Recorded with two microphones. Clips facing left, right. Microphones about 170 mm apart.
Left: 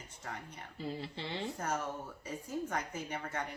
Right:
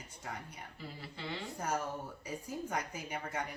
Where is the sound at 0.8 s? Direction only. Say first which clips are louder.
Left 7 dB; 25° left (ahead or behind).